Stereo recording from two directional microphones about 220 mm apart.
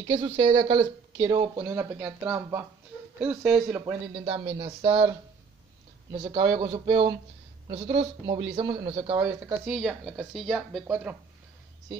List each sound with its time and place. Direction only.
0.0 s a woman's voice: 25° right (ahead or behind); by 3.8 s centre (ahead or behind)
3.8 s speech: 25° right (ahead or behind)
6.1 s speech: 20° right (ahead or behind)
9.7 s a woman's voice: centre (ahead or behind)